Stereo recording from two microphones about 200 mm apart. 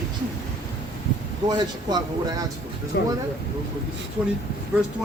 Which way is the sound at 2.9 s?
60° left (ahead or behind).